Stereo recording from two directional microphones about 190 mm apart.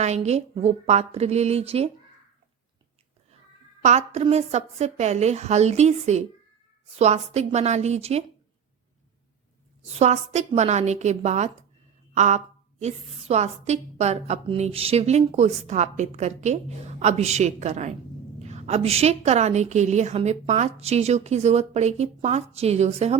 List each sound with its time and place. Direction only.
0.0 s a woman's voice: 35° right (ahead or behind)
3.8 s a woman's voice: 35° right (ahead or behind)
10.0 s a woman's voice: 35° right (ahead or behind)